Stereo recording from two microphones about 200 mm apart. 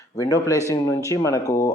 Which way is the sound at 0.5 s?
15° right (ahead or behind).